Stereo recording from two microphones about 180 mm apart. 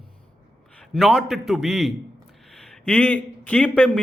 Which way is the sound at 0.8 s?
Centre (ahead or behind).